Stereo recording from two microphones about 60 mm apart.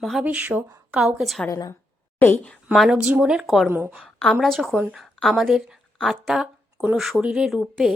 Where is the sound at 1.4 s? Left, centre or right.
Left.